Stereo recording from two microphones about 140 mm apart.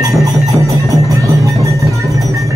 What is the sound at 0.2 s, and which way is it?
Music, 25° right (ahead or behind).